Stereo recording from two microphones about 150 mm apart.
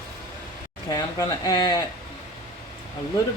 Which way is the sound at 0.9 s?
25° left (ahead or behind).